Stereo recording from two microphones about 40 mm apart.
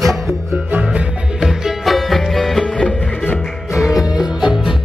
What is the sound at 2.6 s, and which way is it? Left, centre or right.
Music, centre.